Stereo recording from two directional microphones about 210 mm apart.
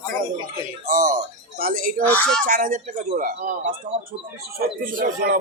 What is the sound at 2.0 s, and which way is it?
Speech, 5° left (ahead or behind).